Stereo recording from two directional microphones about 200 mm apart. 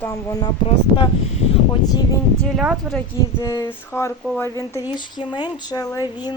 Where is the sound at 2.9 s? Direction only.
15° left (ahead or behind).